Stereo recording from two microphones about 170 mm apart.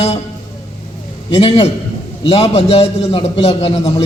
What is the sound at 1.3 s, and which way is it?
A man's voice, 35° left (ahead or behind).